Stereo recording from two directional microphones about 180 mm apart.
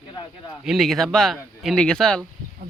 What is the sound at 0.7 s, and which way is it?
Speech, centre (ahead or behind).